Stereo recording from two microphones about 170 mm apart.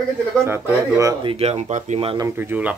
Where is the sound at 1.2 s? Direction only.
35° right (ahead or behind).